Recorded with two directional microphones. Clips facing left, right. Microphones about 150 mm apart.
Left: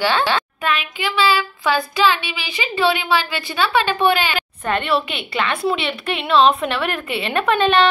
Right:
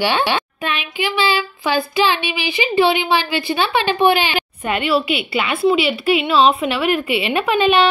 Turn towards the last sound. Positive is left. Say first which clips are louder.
# right 1 dB
turn(degrees=-10)  # may be behind; listen again after turning